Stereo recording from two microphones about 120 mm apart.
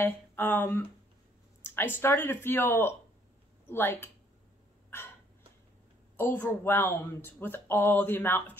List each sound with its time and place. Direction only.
0.0 s speech: 15° left (ahead or behind)
6.1 s speech: 15° left (ahead or behind)